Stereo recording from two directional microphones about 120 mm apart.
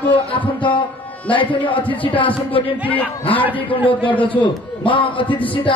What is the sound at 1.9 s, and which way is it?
Speech, 15° left (ahead or behind).